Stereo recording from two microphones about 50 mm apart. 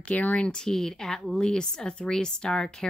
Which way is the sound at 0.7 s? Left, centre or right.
Centre.